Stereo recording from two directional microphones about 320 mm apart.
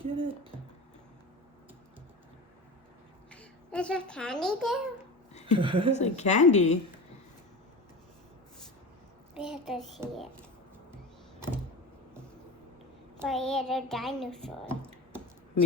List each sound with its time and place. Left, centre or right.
0.0 s a sound: centre
3.3 s a woman's voice: centre
5.5 s speech: centre
6.0 s a woman's voice: left
9.3 s child singing: centre
13.1 s a child's voice: centre